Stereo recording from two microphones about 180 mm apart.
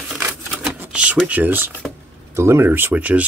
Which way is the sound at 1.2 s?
10° right (ahead or behind).